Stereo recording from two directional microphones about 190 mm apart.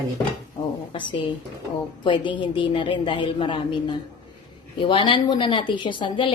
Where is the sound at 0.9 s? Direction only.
25° left (ahead or behind).